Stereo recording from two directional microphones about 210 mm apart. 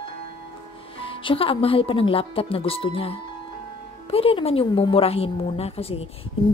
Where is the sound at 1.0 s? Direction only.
25° left (ahead or behind).